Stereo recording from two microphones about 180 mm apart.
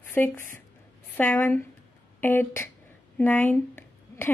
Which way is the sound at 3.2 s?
10° left (ahead or behind).